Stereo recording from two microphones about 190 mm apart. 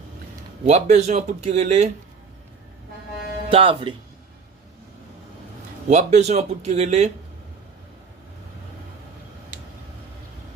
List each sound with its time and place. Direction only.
0.6 s speech: 35° right (ahead or behind)
3.5 s speech: 30° right (ahead or behind)
5.9 s speech: 40° right (ahead or behind)